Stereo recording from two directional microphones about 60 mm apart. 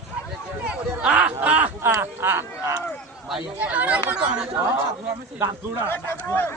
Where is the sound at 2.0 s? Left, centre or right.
Right.